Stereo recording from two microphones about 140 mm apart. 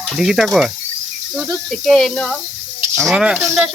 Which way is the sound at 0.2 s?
Centre (ahead or behind).